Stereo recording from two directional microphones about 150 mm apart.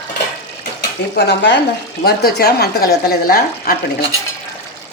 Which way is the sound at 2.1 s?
90° left.